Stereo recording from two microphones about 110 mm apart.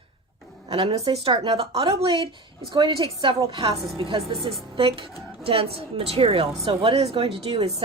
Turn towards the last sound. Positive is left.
turn(degrees=-60)  # may be behind; listen again after turning